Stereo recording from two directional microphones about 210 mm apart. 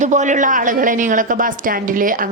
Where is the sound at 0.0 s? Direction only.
35° right (ahead or behind).